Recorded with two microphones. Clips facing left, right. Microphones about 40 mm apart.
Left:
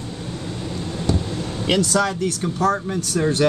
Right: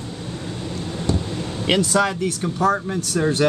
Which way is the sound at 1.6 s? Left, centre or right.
Right.